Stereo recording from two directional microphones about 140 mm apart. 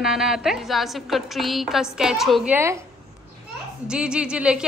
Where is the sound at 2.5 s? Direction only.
20° right (ahead or behind).